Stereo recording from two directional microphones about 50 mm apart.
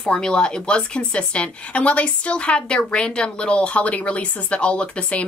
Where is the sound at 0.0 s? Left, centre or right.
Centre.